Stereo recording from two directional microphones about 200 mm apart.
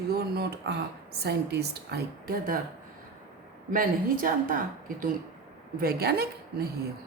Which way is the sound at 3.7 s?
45° right (ahead or behind).